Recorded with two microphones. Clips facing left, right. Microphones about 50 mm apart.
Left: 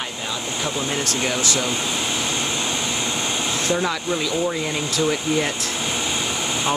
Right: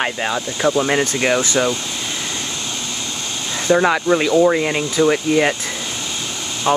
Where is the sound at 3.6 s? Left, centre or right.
Right.